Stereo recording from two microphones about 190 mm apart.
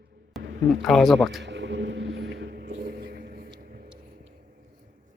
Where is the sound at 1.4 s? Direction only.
70° right (ahead or behind).